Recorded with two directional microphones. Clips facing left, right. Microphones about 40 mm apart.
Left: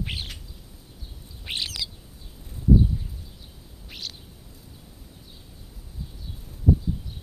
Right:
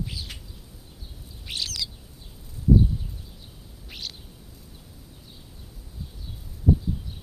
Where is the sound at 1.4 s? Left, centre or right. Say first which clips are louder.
Left 1 dB; left.